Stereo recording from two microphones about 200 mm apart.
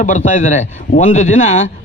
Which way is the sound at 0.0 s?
40° left (ahead or behind).